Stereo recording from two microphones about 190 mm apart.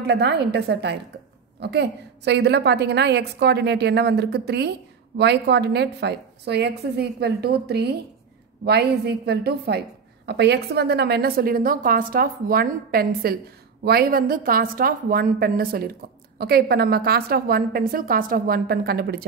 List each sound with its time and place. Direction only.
0.0 s a woman's voice: 60° right (ahead or behind)